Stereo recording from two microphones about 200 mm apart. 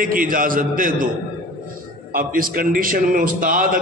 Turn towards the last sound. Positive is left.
turn(degrees=-45)  # may be behind; listen again after turning